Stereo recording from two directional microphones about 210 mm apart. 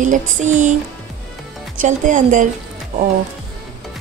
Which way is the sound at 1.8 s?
35° right (ahead or behind).